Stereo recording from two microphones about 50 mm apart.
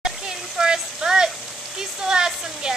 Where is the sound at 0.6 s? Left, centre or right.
Centre.